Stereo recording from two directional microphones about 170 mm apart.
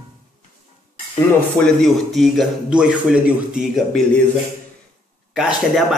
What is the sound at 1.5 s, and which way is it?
Speech, 5° left (ahead or behind).